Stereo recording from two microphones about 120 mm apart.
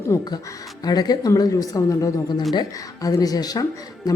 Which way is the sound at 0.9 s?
35° left (ahead or behind).